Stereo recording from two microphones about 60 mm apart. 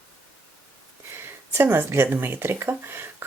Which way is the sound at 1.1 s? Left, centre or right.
Right.